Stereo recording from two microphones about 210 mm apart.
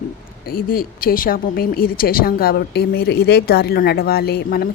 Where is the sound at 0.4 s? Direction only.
45° left (ahead or behind).